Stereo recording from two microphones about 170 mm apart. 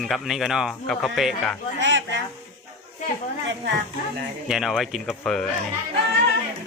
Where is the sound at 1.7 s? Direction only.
90° right.